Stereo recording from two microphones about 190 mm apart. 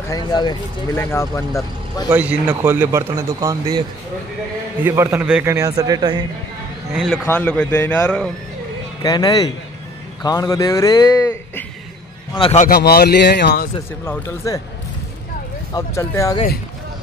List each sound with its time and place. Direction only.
0.1 s a man's voice: 25° left (ahead or behind)
2.0 s a man's voice: 10° right (ahead or behind)
4.8 s a man's voice: 15° right (ahead or behind)
7.2 s a man's voice: 10° left (ahead or behind)
9.0 s a man's voice: 20° left (ahead or behind)
12.4 s a man's voice: 30° left (ahead or behind)
12.6 s speech: 55° left (ahead or behind)
14.0 s a man's voice: 10° left (ahead or behind)
15.7 s a man's voice: 15° left (ahead or behind)